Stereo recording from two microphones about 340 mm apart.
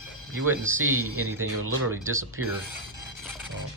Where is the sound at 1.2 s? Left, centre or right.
Right.